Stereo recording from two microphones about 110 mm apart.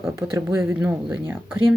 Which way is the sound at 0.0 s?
25° right (ahead or behind).